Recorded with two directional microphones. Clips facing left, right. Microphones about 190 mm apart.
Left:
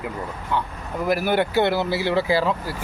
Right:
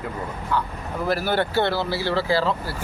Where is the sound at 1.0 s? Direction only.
15° left (ahead or behind).